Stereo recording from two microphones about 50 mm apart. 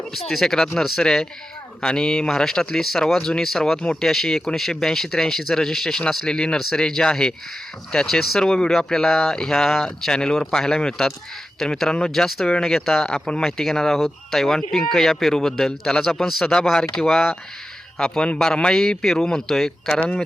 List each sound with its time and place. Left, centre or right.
0.1 s speech: centre
11.6 s speech: centre